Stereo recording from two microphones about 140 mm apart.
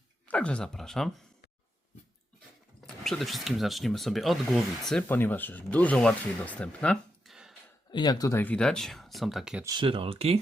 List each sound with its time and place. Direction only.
0.3 s speech: 10° left (ahead or behind)
2.8 s speech: centre (ahead or behind)
5.0 s speech: 15° left (ahead or behind); by 7.5 s centre (ahead or behind)
7.9 s speech: 30° left (ahead or behind)
8.4 s speech: 10° left (ahead or behind)
9.6 s speech: 35° right (ahead or behind)